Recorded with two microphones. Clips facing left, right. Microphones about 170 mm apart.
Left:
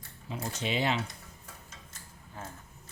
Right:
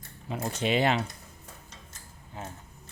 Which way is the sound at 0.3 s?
55° right (ahead or behind).